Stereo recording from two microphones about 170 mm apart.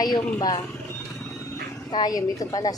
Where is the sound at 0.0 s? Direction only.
25° left (ahead or behind).